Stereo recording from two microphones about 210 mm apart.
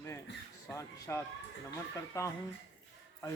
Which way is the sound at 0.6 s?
15° left (ahead or behind).